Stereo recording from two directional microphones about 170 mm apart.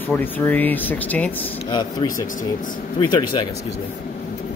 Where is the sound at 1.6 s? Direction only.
25° left (ahead or behind).